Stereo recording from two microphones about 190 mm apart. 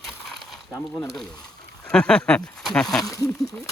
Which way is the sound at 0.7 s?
15° left (ahead or behind).